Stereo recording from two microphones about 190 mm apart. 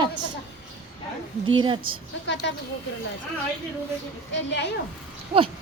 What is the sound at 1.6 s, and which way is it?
Speech, 25° right (ahead or behind).